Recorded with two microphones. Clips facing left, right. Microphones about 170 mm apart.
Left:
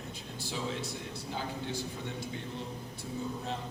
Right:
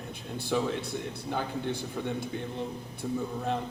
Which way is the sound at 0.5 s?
60° right (ahead or behind).